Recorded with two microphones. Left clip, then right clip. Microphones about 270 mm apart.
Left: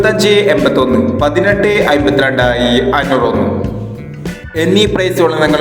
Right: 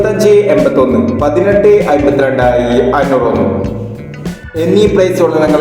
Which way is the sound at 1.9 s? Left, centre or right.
Left.